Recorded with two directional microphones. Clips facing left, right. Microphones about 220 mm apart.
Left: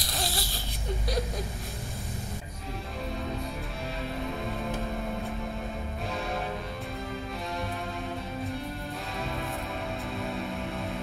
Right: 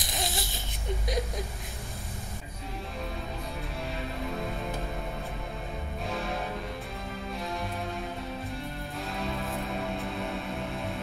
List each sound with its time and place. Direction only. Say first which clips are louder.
0.0 s baby cry: even; 20° right (ahead or behind)